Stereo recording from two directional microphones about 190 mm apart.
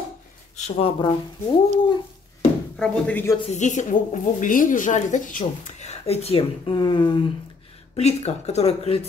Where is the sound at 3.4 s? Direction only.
40° left (ahead or behind).